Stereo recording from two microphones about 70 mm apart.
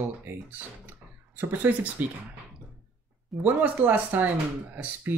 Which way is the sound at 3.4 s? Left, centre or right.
Right.